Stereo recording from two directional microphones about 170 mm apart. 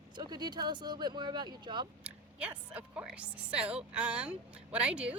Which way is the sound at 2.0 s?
5° right (ahead or behind).